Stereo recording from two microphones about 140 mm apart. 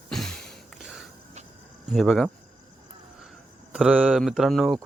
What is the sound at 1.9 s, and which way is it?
Speech, centre (ahead or behind).